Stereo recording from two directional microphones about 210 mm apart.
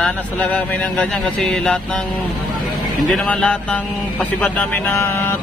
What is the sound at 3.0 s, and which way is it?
Speech, 5° left (ahead or behind).